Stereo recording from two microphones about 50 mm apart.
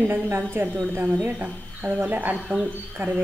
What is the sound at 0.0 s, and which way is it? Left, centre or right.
Speech, right.